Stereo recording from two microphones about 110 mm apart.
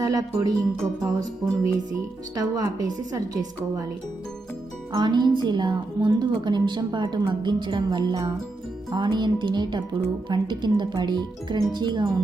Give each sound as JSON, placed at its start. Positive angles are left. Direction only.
{"t": 0.0, "sound": "speech", "side_deg": -35}
{"t": 4.9, "sound": "a woman's voice", "side_deg": -45}